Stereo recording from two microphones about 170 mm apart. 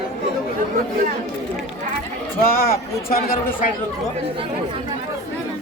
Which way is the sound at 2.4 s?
60° left (ahead or behind).